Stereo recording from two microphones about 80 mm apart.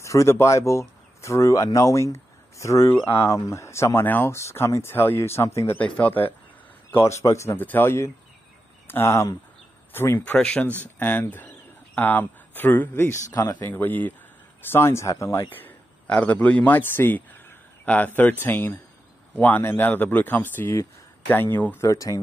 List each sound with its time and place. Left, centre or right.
0.0 s speech: left
5.8 s speech: centre
6.9 s speech: left
7.5 s speech: left
13.3 s speech: left
13.6 s speech: left
15.5 s a man's voice: left
21.8 s speech: left